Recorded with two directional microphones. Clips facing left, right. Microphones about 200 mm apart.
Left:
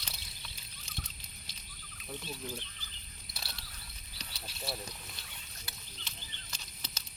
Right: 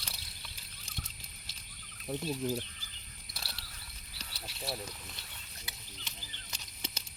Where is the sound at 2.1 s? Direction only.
40° right (ahead or behind).